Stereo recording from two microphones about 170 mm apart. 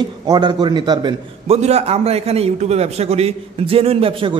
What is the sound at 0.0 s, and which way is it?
A man's voice, 25° right (ahead or behind).